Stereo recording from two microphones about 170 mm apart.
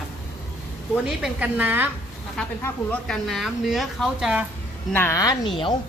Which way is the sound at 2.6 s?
5° left (ahead or behind).